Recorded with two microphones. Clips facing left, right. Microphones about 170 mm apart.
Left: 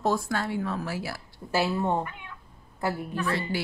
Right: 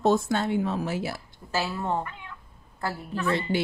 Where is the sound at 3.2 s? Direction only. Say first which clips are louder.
Right 5 dB; 20° right (ahead or behind).